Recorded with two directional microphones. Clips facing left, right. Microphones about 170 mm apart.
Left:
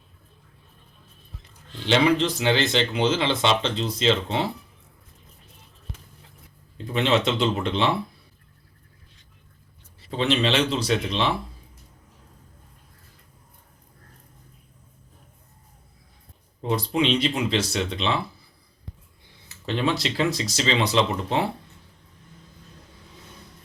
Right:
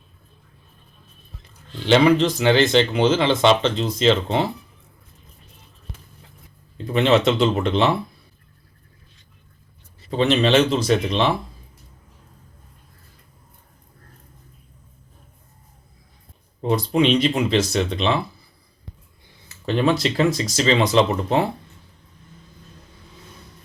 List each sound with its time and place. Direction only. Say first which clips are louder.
1.9 s speech: right 5 dB; 50° right (ahead or behind)
6.9 s speech: right 5 dB; 50° right (ahead or behind)
10.2 s speech: right 5 dB; 45° right (ahead or behind)
17.2 s speech: right 5 dB; 50° right (ahead or behind)
19.6 s speech: right 5 dB; 45° right (ahead or behind)